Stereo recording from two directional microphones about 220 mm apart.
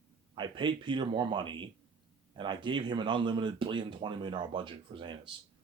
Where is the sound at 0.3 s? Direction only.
20° right (ahead or behind).